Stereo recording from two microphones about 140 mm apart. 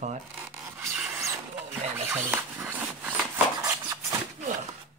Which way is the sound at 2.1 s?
15° right (ahead or behind).